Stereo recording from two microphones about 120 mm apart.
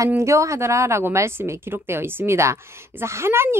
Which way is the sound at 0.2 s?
25° right (ahead or behind).